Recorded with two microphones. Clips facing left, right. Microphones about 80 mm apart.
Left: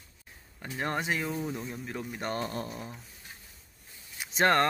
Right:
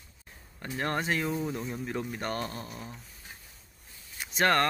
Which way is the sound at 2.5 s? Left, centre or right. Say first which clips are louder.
Left 4 dB; left.